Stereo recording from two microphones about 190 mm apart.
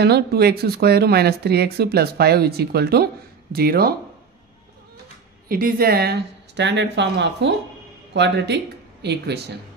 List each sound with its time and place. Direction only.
0.0 s speech: 60° right (ahead or behind)
5.5 s speech: 50° right (ahead or behind)